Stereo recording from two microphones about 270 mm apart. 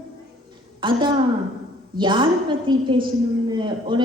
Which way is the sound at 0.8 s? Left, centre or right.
Centre.